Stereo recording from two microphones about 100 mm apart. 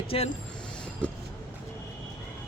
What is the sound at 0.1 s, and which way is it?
Speech, 70° left (ahead or behind).